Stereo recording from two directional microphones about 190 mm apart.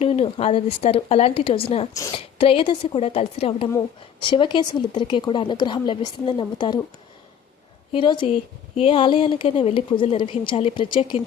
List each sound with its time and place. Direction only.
0.0 s speech: 30° left (ahead or behind)
7.9 s speech: 25° left (ahead or behind)